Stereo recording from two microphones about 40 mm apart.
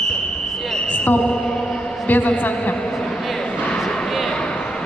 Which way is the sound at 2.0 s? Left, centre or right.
Left.